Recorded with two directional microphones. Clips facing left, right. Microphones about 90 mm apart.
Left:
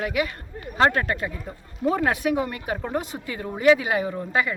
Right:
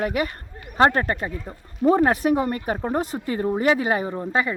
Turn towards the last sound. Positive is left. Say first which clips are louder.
# right 1 dB
turn(degrees=-30)  # may be behind; listen again after turning